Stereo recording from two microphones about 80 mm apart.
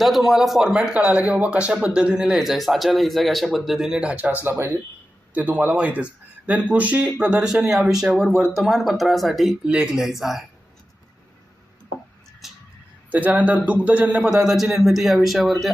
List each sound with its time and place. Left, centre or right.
0.0 s speech: centre
4.4 s speech: right
5.3 s speech: centre
9.6 s speech: centre
12.4 s a sound: centre
13.1 s a man's voice: right; by 15.7 s centre